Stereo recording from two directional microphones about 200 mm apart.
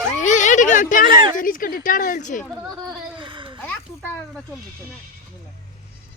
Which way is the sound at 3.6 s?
5° left (ahead or behind).